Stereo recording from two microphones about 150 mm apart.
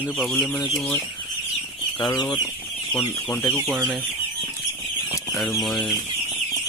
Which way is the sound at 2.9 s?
10° left (ahead or behind).